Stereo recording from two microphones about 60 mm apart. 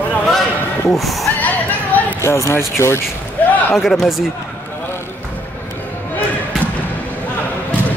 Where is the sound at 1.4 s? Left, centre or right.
Left.